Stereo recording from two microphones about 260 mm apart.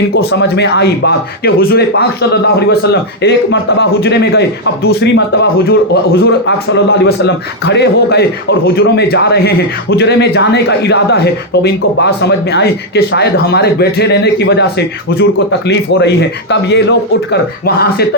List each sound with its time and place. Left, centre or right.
0.2 s a man's voice: left